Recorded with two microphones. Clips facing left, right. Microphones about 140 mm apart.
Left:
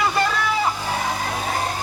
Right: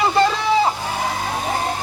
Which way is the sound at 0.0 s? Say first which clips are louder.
Right 4 dB; 25° right (ahead or behind).